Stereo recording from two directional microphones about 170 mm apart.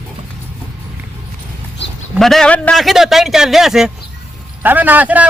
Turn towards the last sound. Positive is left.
turn(degrees=-10)  # may be behind; listen again after turning